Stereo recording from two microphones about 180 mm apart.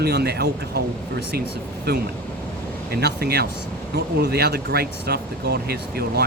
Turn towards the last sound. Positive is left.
turn(degrees=-60)  # may be behind; listen again after turning